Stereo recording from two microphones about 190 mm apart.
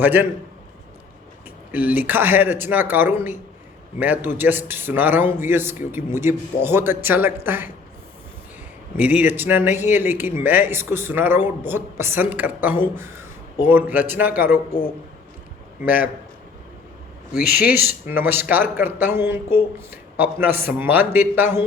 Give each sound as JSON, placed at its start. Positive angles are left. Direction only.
{"t": 0.0, "sound": "speech", "side_deg": -10}
{"t": 1.7, "sound": "speech", "side_deg": -10}
{"t": 9.0, "sound": "speech", "side_deg": -10}
{"t": 15.8, "sound": "speech", "side_deg": -10}
{"t": 17.8, "sound": "speech", "side_deg": -10}